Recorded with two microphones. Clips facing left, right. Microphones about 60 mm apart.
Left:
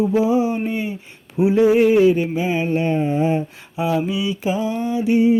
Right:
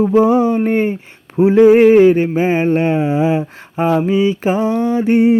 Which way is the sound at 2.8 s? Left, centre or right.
Right.